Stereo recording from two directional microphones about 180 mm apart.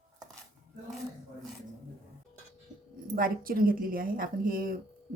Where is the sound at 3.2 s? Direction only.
50° right (ahead or behind).